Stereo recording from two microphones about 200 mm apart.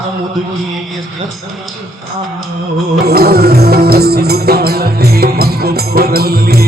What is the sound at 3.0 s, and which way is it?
Music, 50° right (ahead or behind).